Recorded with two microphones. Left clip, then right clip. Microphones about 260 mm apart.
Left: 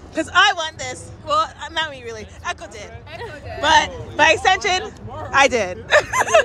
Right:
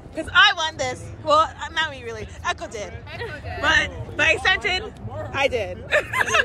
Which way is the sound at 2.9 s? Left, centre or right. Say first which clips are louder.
Even; left.